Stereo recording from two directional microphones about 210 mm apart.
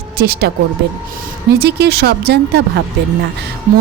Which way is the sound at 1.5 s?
50° right (ahead or behind).